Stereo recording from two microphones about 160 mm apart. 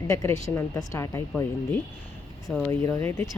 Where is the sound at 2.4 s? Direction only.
Centre (ahead or behind).